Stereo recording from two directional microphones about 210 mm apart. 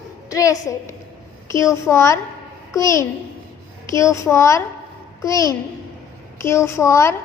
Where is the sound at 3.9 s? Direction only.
15° left (ahead or behind).